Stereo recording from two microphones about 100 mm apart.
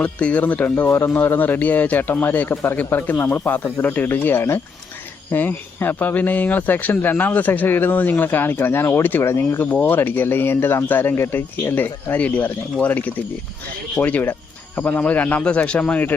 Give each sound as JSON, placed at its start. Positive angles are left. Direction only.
{"t": 0.0, "sound": "speech", "side_deg": 15}